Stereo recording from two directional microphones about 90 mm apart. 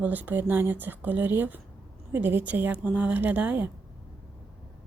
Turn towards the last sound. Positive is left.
turn(degrees=-20)  # may be behind; listen again after turning